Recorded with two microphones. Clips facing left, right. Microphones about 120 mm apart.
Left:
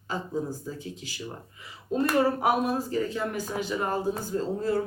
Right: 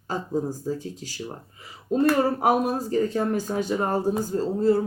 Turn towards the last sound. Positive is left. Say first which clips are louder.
# right 5 dB
turn(degrees=-30)  # may be behind; listen again after turning